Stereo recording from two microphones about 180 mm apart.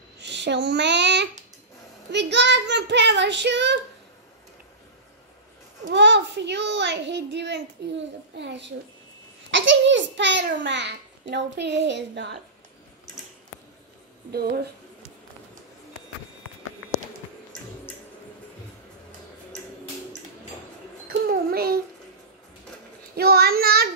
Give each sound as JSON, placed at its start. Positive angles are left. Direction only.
{"t": 0.2, "sound": "a child's voice", "side_deg": -75}
{"t": 5.9, "sound": "a child's voice", "side_deg": -75}
{"t": 9.5, "sound": "a child's voice", "side_deg": -90}
{"t": 14.3, "sound": "speech", "side_deg": -60}
{"t": 21.3, "sound": "a sound", "side_deg": -55}
{"t": 23.1, "sound": "child singing", "side_deg": -60}